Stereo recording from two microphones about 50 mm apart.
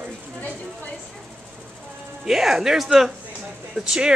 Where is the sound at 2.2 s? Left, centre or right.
Centre.